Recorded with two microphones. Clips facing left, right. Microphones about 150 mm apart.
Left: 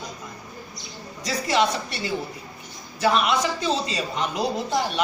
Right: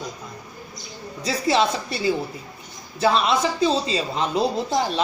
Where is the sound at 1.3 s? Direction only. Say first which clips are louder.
Right 2 dB; 30° right (ahead or behind).